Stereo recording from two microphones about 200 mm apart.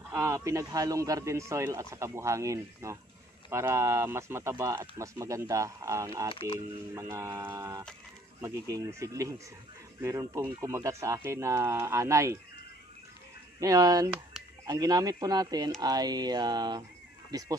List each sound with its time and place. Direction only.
0.1 s speech: 15° right (ahead or behind)
6.3 s speech: 25° left (ahead or behind)
6.9 s speech: 15° right (ahead or behind)
13.6 s speech: 15° right (ahead or behind)